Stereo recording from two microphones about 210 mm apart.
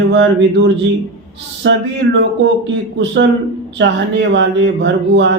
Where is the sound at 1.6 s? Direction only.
60° right (ahead or behind).